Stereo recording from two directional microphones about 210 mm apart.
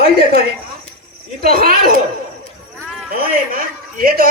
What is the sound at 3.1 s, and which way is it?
A woman's voice, 45° right (ahead or behind).